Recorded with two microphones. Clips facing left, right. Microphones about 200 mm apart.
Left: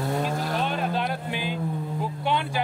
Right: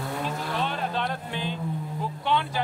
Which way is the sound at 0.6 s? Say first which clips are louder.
Left 2 dB; 10° left (ahead or behind).